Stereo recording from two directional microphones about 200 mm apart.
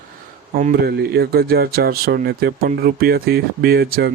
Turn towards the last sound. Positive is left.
turn(degrees=-55)  # may be behind; listen again after turning